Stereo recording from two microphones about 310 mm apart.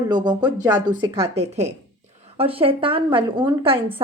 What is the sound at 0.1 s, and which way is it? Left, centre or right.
A woman's voice, centre.